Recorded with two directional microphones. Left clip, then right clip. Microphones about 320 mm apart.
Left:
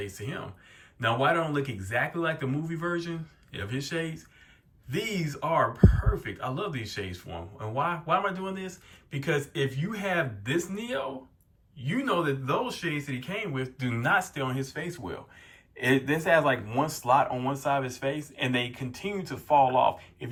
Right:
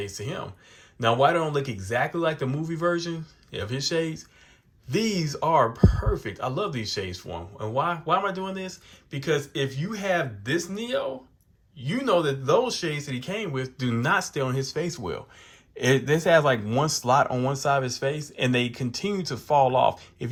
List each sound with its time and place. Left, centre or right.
0.0 s speech: centre
16.1 s speech: right